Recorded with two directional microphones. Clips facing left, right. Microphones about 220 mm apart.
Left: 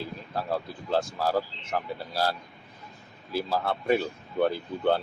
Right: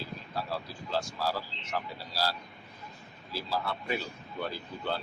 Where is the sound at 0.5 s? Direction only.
55° left (ahead or behind).